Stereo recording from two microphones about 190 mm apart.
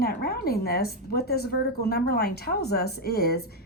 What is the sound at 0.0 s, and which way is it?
Speech, 55° left (ahead or behind).